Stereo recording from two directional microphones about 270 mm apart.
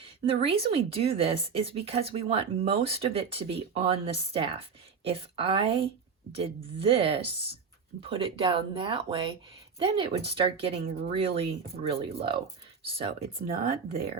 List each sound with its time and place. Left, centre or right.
0.0 s speech: right
13.5 s speech: right